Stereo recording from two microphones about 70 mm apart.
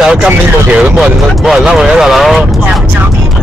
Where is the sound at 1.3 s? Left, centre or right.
Centre.